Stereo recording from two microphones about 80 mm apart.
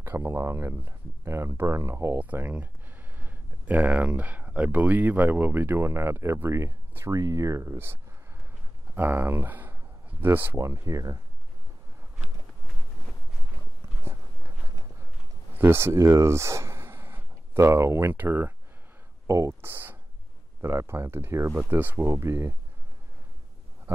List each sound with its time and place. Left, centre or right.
0.0 s speech: right
2.1 s speech: right
10.6 s speech: right
15.5 s speech: right
19.2 s speech: right
19.6 s speech: right